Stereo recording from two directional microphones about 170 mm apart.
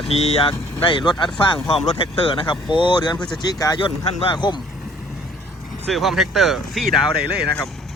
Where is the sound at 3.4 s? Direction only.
25° left (ahead or behind).